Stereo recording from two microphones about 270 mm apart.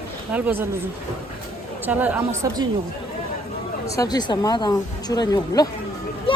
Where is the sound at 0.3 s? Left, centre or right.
Centre.